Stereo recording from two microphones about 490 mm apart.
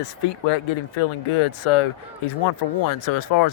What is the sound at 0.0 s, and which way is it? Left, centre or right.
Speech, left.